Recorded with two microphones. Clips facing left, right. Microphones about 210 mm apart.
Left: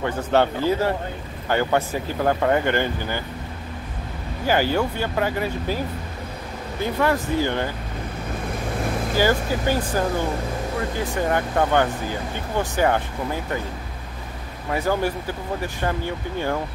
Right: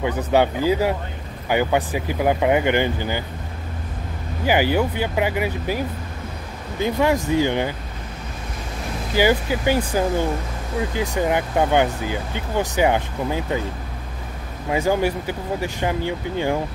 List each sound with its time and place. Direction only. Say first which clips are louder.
0.0 s speech: right 1 dB; 10° right (ahead or behind)
4.5 s speech: right 2 dB; 15° right (ahead or behind)
6.8 s speech: right 2 dB; 15° right (ahead or behind)
9.1 s speech: right 3 dB; 15° right (ahead or behind)
11.2 s speech: right 1 dB; 15° right (ahead or behind)
14.7 s speech: right 3 dB; 15° right (ahead or behind)